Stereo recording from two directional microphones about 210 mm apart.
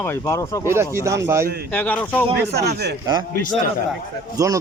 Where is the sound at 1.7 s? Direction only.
5° left (ahead or behind).